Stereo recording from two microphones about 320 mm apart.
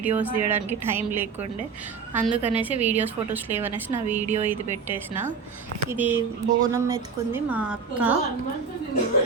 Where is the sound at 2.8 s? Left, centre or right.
Right.